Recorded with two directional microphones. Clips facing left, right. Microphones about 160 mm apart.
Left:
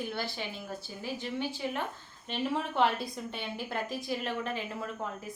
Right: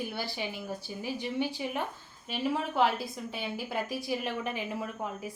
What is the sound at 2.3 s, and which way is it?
Speech, 5° right (ahead or behind).